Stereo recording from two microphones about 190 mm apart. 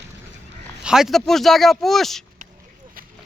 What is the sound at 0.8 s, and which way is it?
Speech, 5° right (ahead or behind).